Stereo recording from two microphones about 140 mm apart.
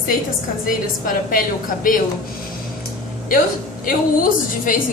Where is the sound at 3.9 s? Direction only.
75° left (ahead or behind).